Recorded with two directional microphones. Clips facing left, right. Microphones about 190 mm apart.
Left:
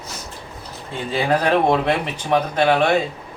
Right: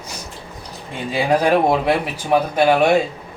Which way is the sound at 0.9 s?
10° right (ahead or behind).